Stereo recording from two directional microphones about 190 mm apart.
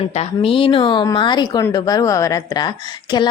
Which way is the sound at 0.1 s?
30° left (ahead or behind).